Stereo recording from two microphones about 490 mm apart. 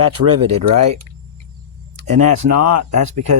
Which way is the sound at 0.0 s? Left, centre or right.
Right.